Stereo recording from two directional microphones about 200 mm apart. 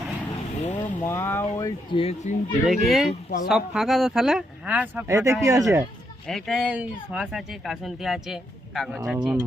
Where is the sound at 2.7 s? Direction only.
Centre (ahead or behind).